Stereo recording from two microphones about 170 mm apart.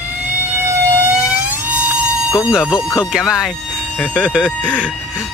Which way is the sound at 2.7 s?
15° left (ahead or behind).